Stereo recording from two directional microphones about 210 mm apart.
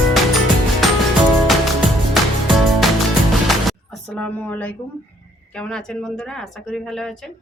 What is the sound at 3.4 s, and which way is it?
Music, centre (ahead or behind).